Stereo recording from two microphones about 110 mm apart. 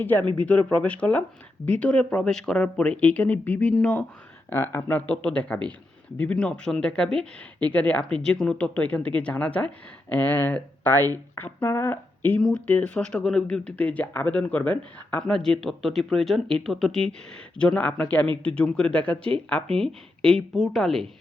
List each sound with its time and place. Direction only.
0.0 s speech: 15° left (ahead or behind)
4.4 s speech: 20° left (ahead or behind)
12.4 s speech: 5° left (ahead or behind)
12.6 s speech: 15° left (ahead or behind)